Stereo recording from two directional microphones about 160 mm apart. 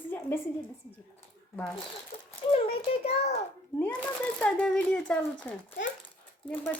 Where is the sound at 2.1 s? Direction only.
35° left (ahead or behind).